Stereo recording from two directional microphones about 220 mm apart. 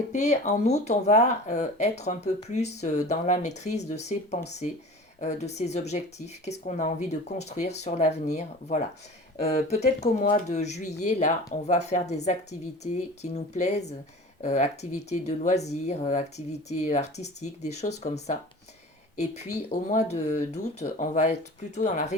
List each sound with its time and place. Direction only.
0.1 s speech: 30° left (ahead or behind)
19.9 s speech: 30° left (ahead or behind)